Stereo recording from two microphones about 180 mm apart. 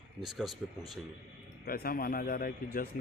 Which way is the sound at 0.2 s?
Centre (ahead or behind).